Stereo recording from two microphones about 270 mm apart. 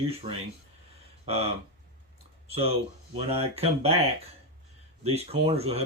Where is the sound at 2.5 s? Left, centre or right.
Right.